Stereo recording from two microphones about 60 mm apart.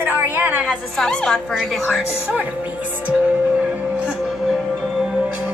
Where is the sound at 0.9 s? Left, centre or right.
Centre.